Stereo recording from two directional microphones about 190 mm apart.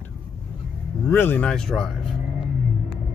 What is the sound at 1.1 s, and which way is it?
Speech, 10° left (ahead or behind).